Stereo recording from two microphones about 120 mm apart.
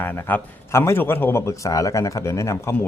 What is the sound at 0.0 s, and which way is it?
A man's voice, 15° left (ahead or behind).